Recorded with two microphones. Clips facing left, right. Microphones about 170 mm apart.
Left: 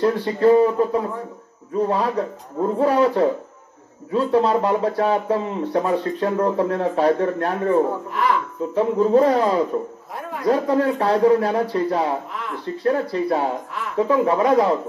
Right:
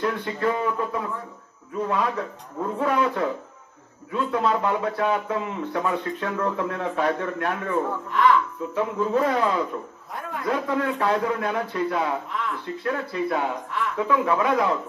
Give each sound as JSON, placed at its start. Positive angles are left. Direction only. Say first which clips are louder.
{"t": 0.0, "sound": "speech", "louder": "left 8 dB", "side_deg": 35}
{"t": 8.1, "sound": "speech", "louder": "right 2 dB", "side_deg": 5}
{"t": 8.7, "sound": "speech", "louder": "left 7 dB", "side_deg": 35}